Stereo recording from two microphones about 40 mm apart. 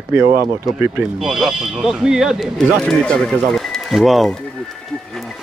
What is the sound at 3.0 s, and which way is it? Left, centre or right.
Speech, left.